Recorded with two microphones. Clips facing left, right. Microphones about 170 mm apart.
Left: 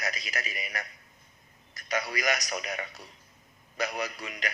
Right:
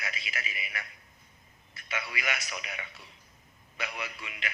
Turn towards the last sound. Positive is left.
turn(degrees=40)  # may be behind; listen again after turning